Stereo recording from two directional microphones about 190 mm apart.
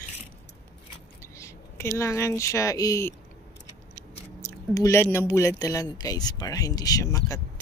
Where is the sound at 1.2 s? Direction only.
15° left (ahead or behind).